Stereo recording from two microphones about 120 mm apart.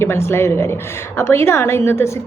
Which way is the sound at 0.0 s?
20° left (ahead or behind).